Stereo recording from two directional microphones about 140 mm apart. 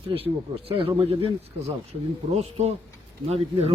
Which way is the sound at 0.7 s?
40° right (ahead or behind).